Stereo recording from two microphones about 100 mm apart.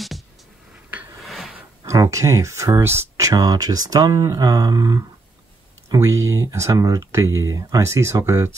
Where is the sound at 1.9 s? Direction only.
35° right (ahead or behind).